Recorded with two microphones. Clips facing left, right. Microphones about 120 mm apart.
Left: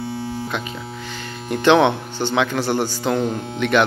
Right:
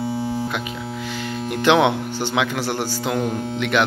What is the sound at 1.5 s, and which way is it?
Speech, 5° right (ahead or behind).